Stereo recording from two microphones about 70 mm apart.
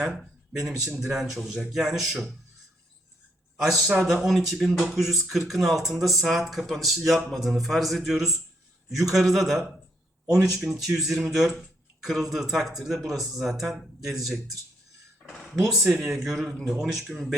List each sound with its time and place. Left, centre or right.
0.0 s speech: centre
3.6 s speech: centre
10.3 s speech: right
10.6 s speech: centre